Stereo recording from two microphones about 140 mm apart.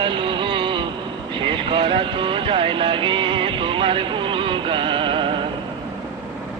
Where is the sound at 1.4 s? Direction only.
35° right (ahead or behind).